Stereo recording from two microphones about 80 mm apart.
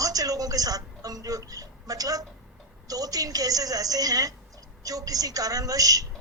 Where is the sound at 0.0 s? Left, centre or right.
Right.